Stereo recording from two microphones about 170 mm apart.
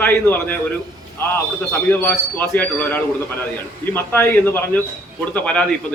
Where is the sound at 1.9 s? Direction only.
10° left (ahead or behind).